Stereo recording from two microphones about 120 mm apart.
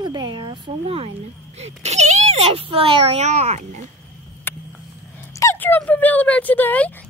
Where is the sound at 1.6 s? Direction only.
65° right (ahead or behind).